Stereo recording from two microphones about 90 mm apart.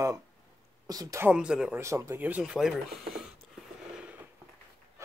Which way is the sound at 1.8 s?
30° right (ahead or behind).